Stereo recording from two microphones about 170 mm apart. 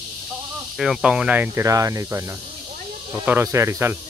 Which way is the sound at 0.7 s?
5° right (ahead or behind).